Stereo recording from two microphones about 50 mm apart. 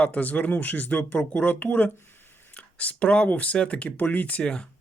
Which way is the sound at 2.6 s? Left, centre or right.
Left.